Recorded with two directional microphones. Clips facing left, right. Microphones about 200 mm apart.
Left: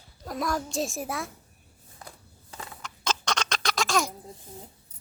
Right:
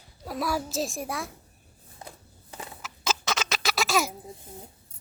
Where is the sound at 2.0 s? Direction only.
20° right (ahead or behind).